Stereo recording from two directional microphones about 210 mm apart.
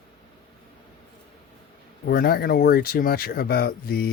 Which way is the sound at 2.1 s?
45° left (ahead or behind).